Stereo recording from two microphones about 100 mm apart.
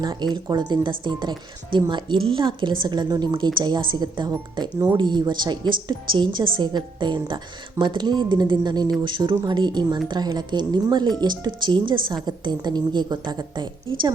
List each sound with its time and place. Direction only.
0.0 s speech: 45° right (ahead or behind)